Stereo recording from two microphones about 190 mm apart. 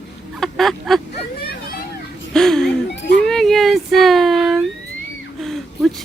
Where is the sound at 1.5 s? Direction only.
50° left (ahead or behind).